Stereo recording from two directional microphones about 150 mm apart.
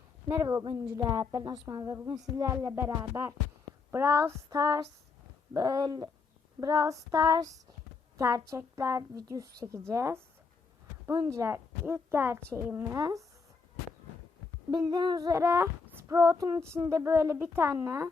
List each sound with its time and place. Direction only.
0.3 s speech: 20° right (ahead or behind)
0.6 s a woman's voice: 30° right (ahead or behind)
14.7 s speech: 25° right (ahead or behind)